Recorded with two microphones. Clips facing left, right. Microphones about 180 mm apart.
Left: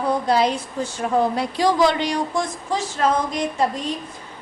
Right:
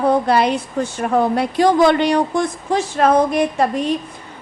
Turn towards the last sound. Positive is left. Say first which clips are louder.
# right 5 dB
turn(degrees=-60)  # may be behind; listen again after turning